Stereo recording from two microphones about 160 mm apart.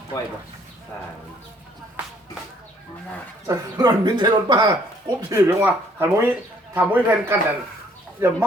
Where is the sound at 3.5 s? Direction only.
25° right (ahead or behind).